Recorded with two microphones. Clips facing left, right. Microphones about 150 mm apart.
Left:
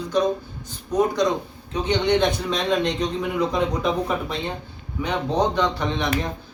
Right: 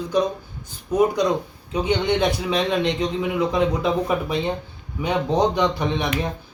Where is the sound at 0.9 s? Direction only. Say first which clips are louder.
Right 2 dB; 10° right (ahead or behind).